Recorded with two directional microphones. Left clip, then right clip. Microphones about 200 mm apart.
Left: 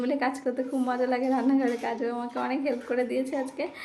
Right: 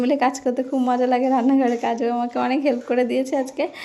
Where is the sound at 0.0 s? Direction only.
35° right (ahead or behind).